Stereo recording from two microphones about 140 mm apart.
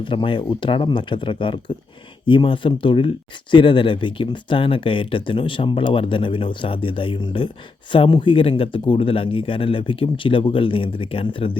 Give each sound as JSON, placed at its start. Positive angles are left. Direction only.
{"t": 0.0, "sound": "speech", "side_deg": 35}